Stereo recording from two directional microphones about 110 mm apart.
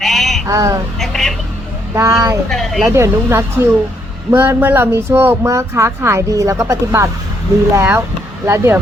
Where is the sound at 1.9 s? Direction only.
30° right (ahead or behind).